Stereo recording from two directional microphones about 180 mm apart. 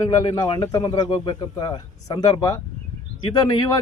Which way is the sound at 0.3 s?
25° left (ahead or behind).